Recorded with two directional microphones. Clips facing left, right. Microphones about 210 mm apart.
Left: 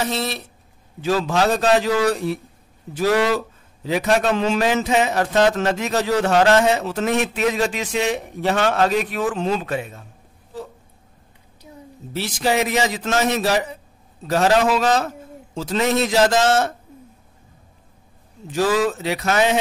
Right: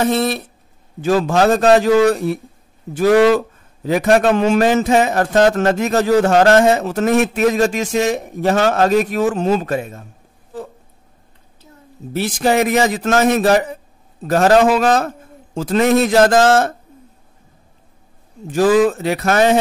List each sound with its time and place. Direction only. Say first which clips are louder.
0.0 s a man's voice: right 7 dB; 55° right (ahead or behind)
12.1 s a man's voice: right 5 dB; 50° right (ahead or behind)
18.5 s a man's voice: right 6 dB; 50° right (ahead or behind)